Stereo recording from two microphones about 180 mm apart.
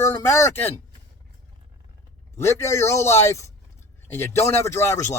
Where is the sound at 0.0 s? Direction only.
15° left (ahead or behind).